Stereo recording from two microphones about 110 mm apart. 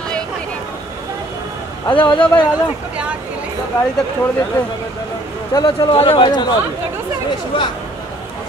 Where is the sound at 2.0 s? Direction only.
50° left (ahead or behind).